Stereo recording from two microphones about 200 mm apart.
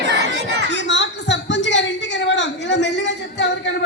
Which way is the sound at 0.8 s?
60° left (ahead or behind).